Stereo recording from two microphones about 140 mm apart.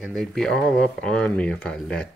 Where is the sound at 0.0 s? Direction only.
Centre (ahead or behind).